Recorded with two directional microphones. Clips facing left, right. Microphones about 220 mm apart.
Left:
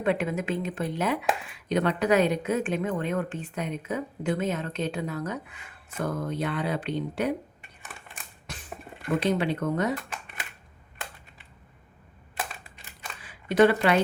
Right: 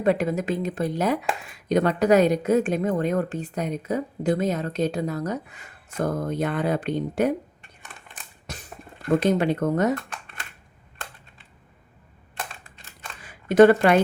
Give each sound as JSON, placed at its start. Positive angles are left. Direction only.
{"t": 0.0, "sound": "a woman's voice", "side_deg": -40}
{"t": 7.8, "sound": "crushing", "side_deg": 5}
{"t": 8.4, "sound": "a sound", "side_deg": -40}
{"t": 9.2, "sound": "speech", "side_deg": -45}
{"t": 13.2, "sound": "speech", "side_deg": -45}